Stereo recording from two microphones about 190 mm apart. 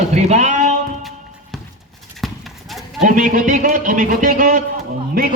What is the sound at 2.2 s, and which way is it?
Clip-clop, centre (ahead or behind).